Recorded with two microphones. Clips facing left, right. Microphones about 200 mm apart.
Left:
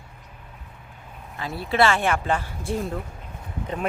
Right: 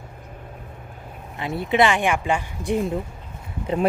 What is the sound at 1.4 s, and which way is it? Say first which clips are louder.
Speech: right 2 dB; 20° right (ahead or behind).